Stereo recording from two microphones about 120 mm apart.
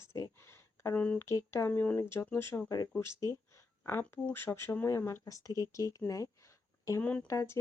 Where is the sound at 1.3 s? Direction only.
25° left (ahead or behind).